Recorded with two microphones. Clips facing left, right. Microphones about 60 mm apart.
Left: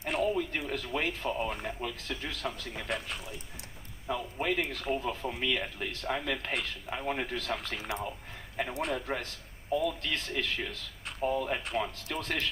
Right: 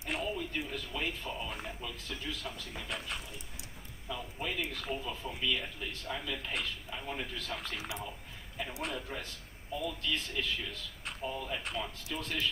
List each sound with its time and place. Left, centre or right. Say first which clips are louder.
0.2 s music: left 6 dB; left
0.6 s a sound: left 5 dB; left
1.6 s speech: left 6 dB; left
4.0 s speech: left 7 dB; left
7.9 s speech: left 5 dB; left